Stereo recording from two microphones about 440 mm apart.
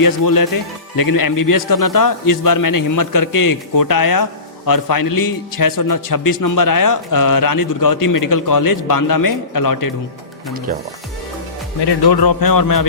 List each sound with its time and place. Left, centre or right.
0.0 s a man's voice: left
11.8 s a man's voice: left